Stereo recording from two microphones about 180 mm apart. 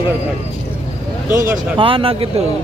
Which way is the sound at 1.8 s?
30° right (ahead or behind).